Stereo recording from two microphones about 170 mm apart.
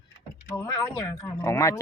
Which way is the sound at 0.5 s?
15° left (ahead or behind).